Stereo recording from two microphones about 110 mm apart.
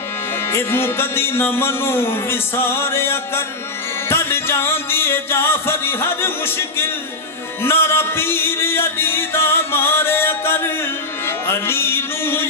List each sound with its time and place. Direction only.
0.5 s music: 20° left (ahead or behind)